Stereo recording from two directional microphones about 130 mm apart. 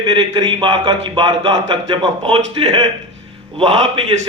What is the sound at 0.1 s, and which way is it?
A man's voice, 35° right (ahead or behind).